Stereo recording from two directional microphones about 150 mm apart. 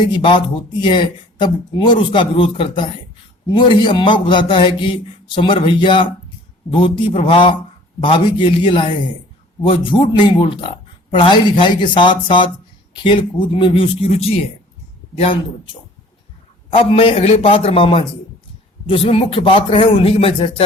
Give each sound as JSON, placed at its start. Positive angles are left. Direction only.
{"t": 0.0, "sound": "speech", "side_deg": 30}
{"t": 16.7, "sound": "speech", "side_deg": 40}